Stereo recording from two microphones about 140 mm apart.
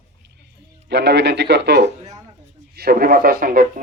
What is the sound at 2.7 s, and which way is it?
Speech, 90° right.